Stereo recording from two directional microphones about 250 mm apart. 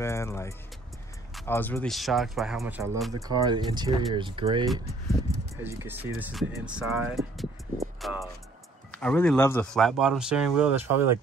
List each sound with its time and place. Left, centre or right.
0.0 s speech: centre
3.1 s speech: centre